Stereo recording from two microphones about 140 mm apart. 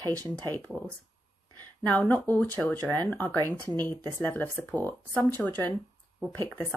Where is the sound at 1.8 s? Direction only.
15° left (ahead or behind).